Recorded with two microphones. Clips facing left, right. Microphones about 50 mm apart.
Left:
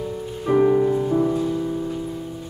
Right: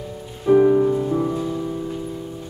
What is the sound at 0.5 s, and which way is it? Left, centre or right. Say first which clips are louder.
Music: right 2 dB; centre.